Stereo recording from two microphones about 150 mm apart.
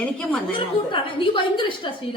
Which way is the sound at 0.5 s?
35° left (ahead or behind).